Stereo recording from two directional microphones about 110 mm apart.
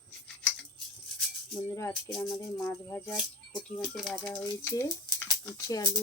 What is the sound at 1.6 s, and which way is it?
Speech, 25° left (ahead or behind).